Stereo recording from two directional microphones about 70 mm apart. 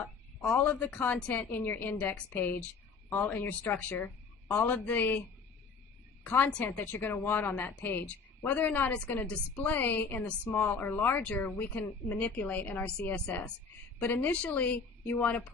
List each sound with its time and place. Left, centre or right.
0.4 s a woman's voice: left
6.5 s a woman's voice: left
10.2 s a woman's voice: left